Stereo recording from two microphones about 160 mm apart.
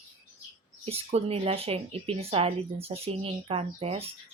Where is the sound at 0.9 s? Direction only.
40° right (ahead or behind).